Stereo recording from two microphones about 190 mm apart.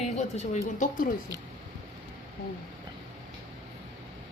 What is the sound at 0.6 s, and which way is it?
Speech, 45° left (ahead or behind).